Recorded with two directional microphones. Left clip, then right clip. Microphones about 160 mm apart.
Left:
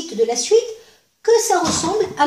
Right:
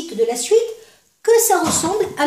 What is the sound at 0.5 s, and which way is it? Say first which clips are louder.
Speech: even; 25° right (ahead or behind).